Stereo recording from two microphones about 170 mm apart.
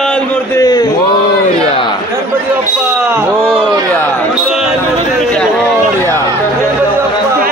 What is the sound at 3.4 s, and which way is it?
Speech, 30° right (ahead or behind).